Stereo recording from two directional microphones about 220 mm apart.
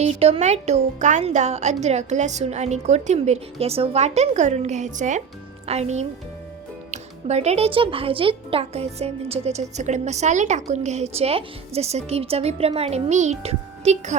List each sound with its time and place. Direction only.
0.0 s speech: 30° right (ahead or behind)